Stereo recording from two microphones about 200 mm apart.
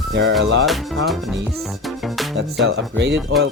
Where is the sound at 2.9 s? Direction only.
55° right (ahead or behind).